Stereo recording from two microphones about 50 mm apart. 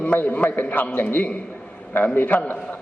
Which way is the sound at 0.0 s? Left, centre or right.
Left.